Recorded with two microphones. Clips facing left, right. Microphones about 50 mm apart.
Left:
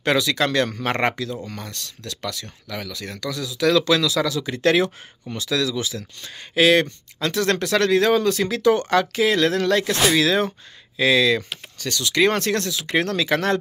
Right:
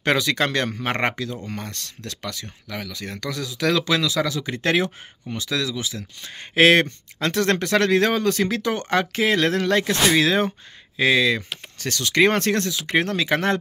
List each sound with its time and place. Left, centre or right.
0.0 s speech: right
0.7 s speech: centre; by 2.1 s right
2.2 s speech: right
3.2 s speech: right; by 6.3 s centre
6.5 s speech: right
11.9 s speech: right
12.9 s speech: centre